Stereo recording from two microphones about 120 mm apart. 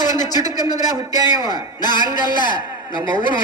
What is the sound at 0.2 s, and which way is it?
Speech, 35° left (ahead or behind).